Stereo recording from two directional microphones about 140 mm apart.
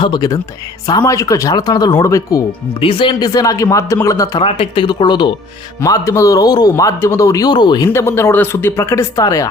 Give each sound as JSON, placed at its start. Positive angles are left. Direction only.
{"t": 0.0, "sound": "a man's voice", "side_deg": 30}
{"t": 2.8, "sound": "a man's voice", "side_deg": 40}
{"t": 4.4, "sound": "speech", "side_deg": 40}
{"t": 5.8, "sound": "a man's voice", "side_deg": 25}
{"t": 7.9, "sound": "speech", "side_deg": 20}